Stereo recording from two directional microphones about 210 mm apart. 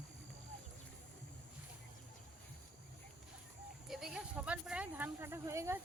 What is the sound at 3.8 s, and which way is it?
Speech, centre (ahead or behind).